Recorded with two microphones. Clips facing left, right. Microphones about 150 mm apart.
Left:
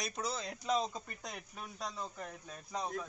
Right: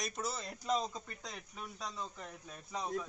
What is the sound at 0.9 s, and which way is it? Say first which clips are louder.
Speech: left 1 dB; 15° left (ahead or behind).